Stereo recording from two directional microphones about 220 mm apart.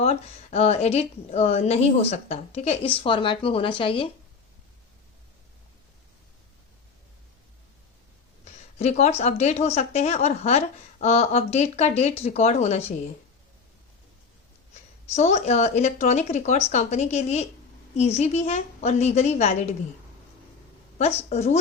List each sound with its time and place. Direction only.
0.0 s speech: 30° left (ahead or behind)
8.8 s speech: 30° left (ahead or behind)
14.7 s speech: 30° left (ahead or behind)
21.2 s speech: 30° left (ahead or behind)